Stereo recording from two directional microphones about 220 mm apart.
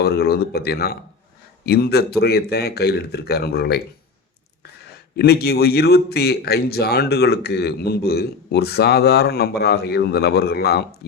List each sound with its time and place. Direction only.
0.0 s speech: 45° left (ahead or behind)
5.1 s speech: 45° left (ahead or behind)